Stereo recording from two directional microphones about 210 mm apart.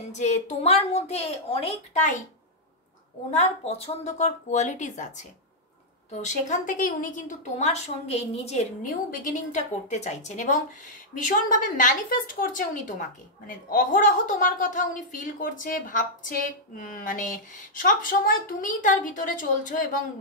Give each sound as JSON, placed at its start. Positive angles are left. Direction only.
{"t": 0.1, "sound": "a woman's voice", "side_deg": 35}
{"t": 3.3, "sound": "a woman's voice", "side_deg": 30}